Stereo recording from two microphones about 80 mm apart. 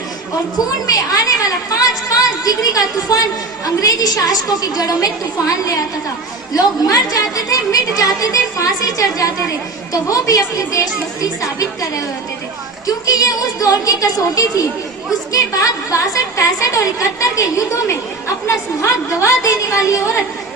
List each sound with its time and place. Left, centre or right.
0.9 s a woman's voice: left